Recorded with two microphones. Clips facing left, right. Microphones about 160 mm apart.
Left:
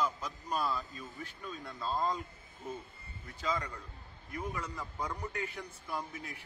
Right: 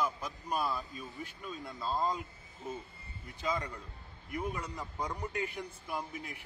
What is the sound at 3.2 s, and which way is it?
A man's voice, 15° right (ahead or behind).